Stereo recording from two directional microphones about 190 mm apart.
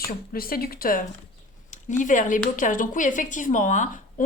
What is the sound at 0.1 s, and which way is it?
A woman's voice, 50° left (ahead or behind).